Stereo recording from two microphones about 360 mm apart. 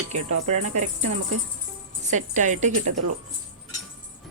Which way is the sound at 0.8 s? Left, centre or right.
Centre.